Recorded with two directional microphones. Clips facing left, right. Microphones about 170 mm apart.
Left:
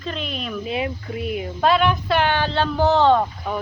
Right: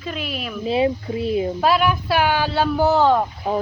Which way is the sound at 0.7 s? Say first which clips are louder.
Right 9 dB; 30° right (ahead or behind).